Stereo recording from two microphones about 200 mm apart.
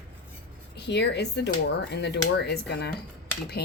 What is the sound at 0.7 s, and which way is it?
Speech, 60° left (ahead or behind).